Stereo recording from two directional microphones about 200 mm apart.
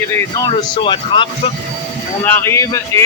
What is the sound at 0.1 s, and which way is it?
A man's voice, 15° left (ahead or behind).